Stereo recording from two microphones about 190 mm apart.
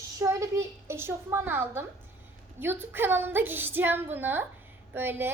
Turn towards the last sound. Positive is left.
turn(degrees=-10)  # may be behind; listen again after turning